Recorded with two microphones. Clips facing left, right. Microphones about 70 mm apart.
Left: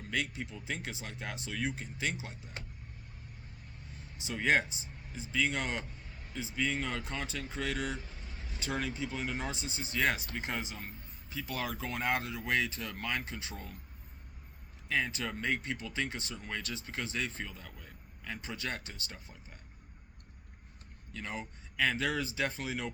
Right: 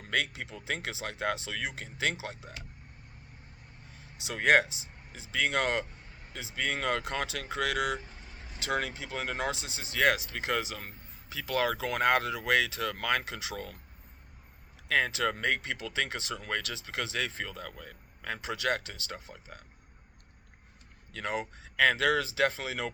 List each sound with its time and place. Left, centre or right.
0.1 s speech: right
4.2 s speech: right
14.8 s speech: right
21.1 s speech: right